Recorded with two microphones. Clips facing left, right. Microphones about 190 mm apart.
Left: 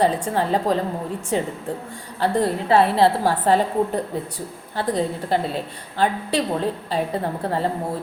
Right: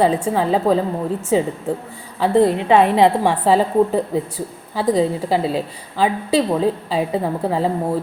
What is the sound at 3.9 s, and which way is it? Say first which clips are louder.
A woman's voice: right 5 dB; 10° right (ahead or behind).